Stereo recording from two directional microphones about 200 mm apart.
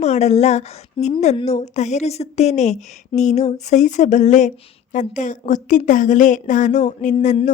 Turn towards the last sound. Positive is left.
turn(degrees=35)  # may be behind; listen again after turning